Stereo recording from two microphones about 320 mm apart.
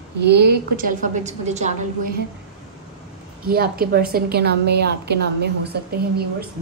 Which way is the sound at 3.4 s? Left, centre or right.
Right.